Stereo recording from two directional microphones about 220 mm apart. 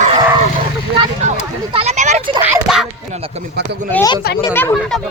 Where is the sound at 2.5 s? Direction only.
Centre (ahead or behind).